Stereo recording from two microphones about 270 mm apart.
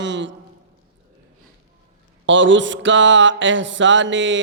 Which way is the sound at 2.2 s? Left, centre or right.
Right.